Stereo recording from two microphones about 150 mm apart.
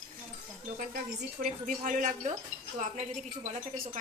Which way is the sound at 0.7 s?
65° right (ahead or behind).